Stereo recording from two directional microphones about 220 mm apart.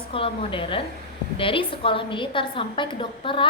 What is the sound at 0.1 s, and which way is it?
A woman's voice, 25° left (ahead or behind).